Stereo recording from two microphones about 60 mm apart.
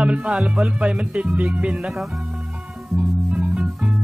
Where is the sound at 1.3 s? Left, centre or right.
Right.